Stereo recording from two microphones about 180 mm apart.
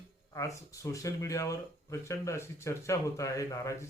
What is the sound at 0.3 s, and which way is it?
Speech, 15° left (ahead or behind).